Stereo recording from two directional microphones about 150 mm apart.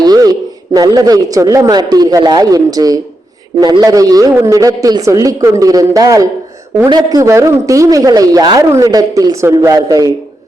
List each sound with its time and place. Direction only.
0.0 s a man's voice: 25° right (ahead or behind)